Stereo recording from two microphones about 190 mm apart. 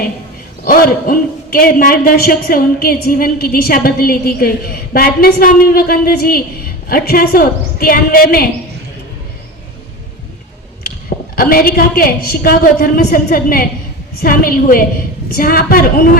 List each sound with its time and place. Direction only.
0.6 s a man's voice: 50° left (ahead or behind)
11.3 s a man's voice: 50° left (ahead or behind)